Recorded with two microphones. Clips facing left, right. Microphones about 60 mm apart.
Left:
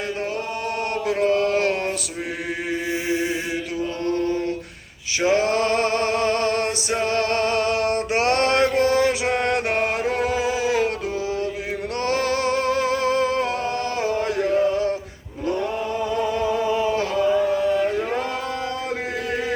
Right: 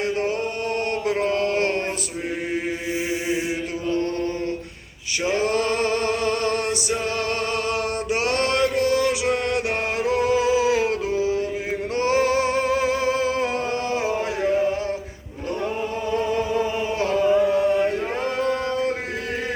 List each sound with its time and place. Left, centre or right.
2.9 s chant: left
5.2 s male singing: left
9.0 s music: centre
9.4 s music: left
10.0 s a sound: centre
11.9 s music: centre
16.5 s chant: centre